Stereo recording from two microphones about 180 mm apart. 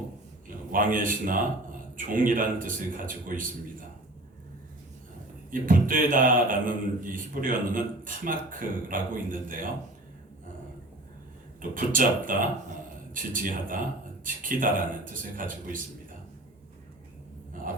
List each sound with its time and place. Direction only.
0.7 s speech: 50° right (ahead or behind)
5.5 s speech: 50° right (ahead or behind)
11.7 s speech: 50° right (ahead or behind)